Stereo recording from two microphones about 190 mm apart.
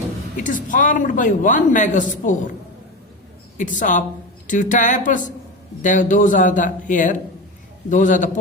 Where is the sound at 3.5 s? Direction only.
45° left (ahead or behind).